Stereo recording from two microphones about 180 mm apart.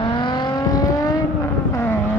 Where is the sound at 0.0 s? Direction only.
25° left (ahead or behind).